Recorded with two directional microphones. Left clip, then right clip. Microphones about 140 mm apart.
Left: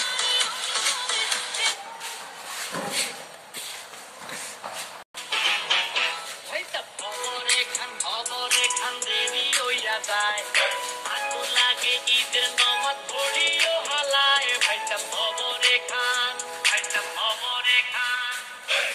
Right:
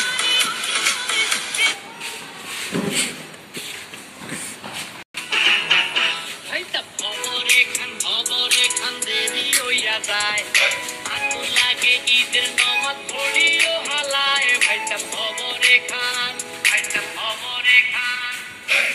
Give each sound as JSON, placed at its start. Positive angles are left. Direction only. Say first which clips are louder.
{"t": 0.0, "sound": "music", "louder": "right 5 dB", "side_deg": 35}
{"t": 5.3, "sound": "music", "louder": "right 7 dB", "side_deg": 20}
{"t": 6.5, "sound": "music", "louder": "right 6 dB", "side_deg": 35}
{"t": 8.3, "sound": "music", "louder": "right 5 dB", "side_deg": 40}
{"t": 8.8, "sound": "music", "louder": "right 3 dB", "side_deg": 20}